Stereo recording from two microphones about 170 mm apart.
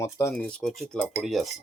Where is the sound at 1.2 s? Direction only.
Centre (ahead or behind).